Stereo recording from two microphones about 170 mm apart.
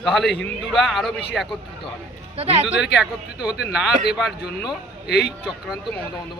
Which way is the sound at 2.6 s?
5° right (ahead or behind).